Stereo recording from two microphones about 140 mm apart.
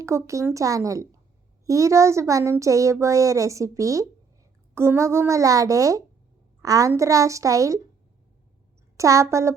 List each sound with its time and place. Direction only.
0.0 s speech: 20° right (ahead or behind)
9.0 s speech: 20° right (ahead or behind)